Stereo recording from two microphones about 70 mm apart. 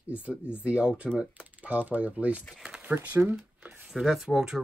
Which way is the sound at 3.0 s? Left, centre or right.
Right.